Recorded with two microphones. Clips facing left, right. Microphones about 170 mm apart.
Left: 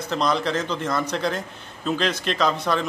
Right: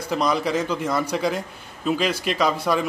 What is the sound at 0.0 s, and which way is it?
A man's voice, 10° right (ahead or behind).